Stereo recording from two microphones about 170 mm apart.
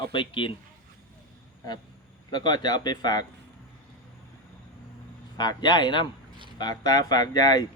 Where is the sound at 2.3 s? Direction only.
25° left (ahead or behind).